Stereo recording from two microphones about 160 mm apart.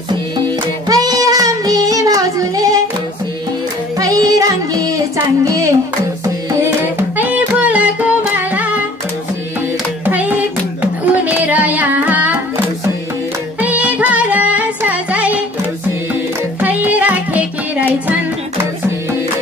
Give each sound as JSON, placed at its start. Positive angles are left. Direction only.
{"t": 0.8, "sound": "child singing", "side_deg": -20}
{"t": 4.0, "sound": "music", "side_deg": -20}
{"t": 7.0, "sound": "music", "side_deg": -10}
{"t": 10.0, "sound": "music", "side_deg": -10}
{"t": 13.6, "sound": "music", "side_deg": -10}
{"t": 16.6, "sound": "music", "side_deg": -10}